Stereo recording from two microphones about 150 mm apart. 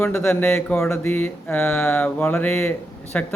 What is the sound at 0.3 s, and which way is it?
Speech, 5° left (ahead or behind).